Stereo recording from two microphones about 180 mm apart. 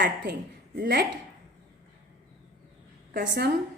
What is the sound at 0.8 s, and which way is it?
Speech, 65° right (ahead or behind).